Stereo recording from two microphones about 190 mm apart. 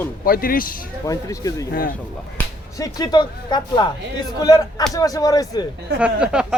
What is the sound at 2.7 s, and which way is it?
Speech, 20° left (ahead or behind).